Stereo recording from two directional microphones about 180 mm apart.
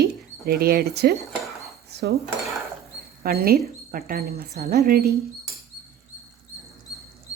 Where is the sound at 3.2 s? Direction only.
55° right (ahead or behind).